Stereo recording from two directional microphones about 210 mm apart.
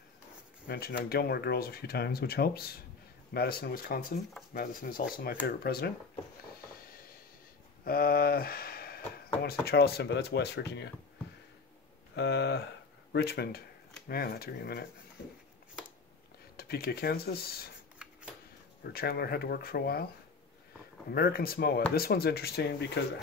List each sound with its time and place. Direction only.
0.7 s speech: 45° left (ahead or behind)
7.8 s a sound: 45° left (ahead or behind)
9.7 s speech: 50° left (ahead or behind)
12.2 s speech: 50° left (ahead or behind)
16.5 s speech: 45° left (ahead or behind)
18.0 s a sound: 5° right (ahead or behind)
18.9 s speech: 50° left (ahead or behind)
21.1 s speech: 45° left (ahead or behind)